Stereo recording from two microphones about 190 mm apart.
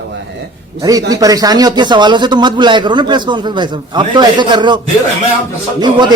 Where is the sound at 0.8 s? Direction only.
20° right (ahead or behind).